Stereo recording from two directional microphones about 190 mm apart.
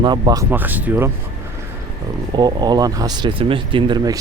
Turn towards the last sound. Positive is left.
turn(degrees=-20)  # may be behind; listen again after turning